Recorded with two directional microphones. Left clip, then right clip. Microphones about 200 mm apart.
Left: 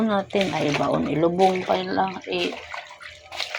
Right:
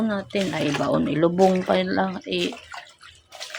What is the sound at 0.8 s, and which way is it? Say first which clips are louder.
Speech: right 3 dB; 25° right (ahead or behind).